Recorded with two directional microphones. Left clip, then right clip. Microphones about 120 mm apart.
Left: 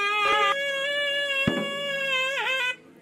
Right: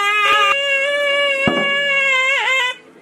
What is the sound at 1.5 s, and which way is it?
Cat, 15° right (ahead or behind).